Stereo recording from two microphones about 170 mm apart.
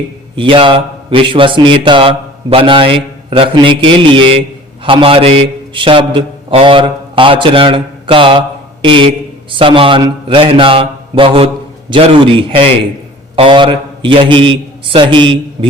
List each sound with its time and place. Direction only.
0.3 s a man's voice: 30° right (ahead or behind)